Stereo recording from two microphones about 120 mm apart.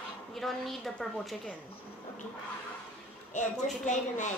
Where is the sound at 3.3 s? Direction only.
90° left.